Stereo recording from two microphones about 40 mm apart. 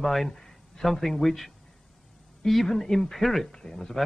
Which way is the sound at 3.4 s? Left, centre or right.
Centre.